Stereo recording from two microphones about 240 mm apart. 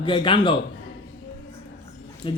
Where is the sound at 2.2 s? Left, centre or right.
Left.